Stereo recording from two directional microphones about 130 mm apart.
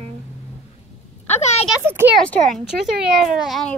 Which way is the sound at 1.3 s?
60° left (ahead or behind).